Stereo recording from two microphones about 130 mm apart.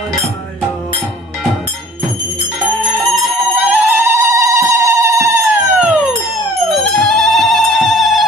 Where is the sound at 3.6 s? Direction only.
15° right (ahead or behind).